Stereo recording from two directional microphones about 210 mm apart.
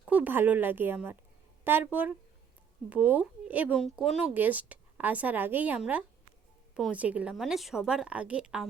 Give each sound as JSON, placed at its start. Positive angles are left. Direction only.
{"t": 0.1, "sound": "a woman's voice", "side_deg": -10}